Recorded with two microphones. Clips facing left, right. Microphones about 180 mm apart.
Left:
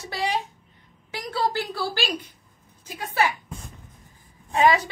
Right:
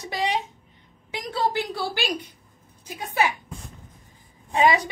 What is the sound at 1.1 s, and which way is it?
A woman's voice, 20° right (ahead or behind).